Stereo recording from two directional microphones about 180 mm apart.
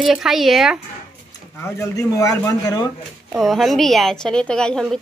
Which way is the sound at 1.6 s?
15° left (ahead or behind).